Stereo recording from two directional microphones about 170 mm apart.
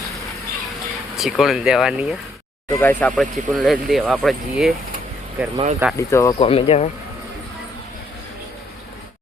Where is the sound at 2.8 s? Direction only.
10° left (ahead or behind).